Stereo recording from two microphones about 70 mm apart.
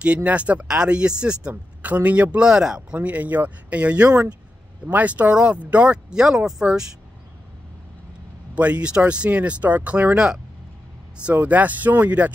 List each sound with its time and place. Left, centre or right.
0.0 s speech: centre
8.5 s speech: centre
10.1 s speech: centre
11.2 s speech: right